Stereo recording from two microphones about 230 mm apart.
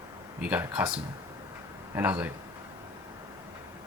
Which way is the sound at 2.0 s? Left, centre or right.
Centre.